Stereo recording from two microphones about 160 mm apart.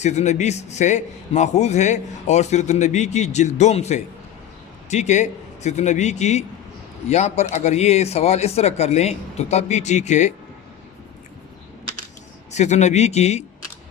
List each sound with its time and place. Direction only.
0.0 s a man's voice: 45° left (ahead or behind)
12.5 s a man's voice: 45° left (ahead or behind)